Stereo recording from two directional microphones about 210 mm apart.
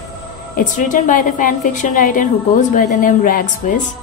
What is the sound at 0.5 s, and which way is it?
A woman's voice, 35° left (ahead or behind).